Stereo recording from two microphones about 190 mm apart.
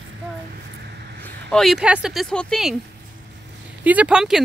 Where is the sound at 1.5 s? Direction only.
Centre (ahead or behind).